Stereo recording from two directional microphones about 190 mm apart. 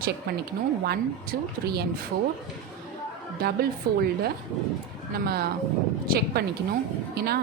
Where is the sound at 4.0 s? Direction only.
55° right (ahead or behind).